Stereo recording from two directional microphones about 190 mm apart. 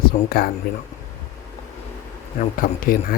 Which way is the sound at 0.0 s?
50° left (ahead or behind).